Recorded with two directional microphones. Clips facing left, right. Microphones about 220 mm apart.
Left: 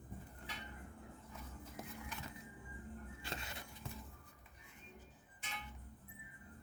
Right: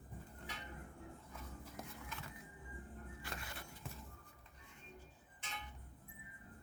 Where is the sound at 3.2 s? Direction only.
25° left (ahead or behind).